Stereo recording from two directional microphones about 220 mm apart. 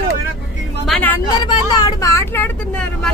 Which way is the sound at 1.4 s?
15° left (ahead or behind).